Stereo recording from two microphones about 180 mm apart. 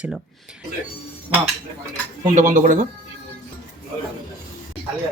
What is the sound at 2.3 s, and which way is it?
Speech, 45° right (ahead or behind).